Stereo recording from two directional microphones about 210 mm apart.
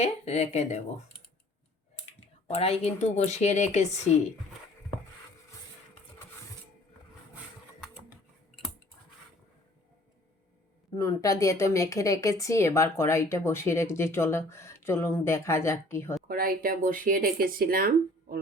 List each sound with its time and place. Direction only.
0.0 s speech: 30° left (ahead or behind)
2.5 s speech: 30° left (ahead or behind)
10.9 s a woman's voice: 15° left (ahead or behind)
16.3 s speech: 45° right (ahead or behind)